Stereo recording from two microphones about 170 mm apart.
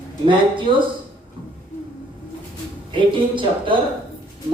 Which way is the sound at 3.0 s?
30° right (ahead or behind).